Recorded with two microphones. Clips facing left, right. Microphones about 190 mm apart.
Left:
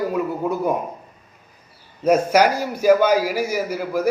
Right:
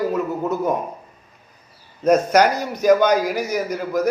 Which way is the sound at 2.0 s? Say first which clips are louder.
Right 1 dB; 10° left (ahead or behind).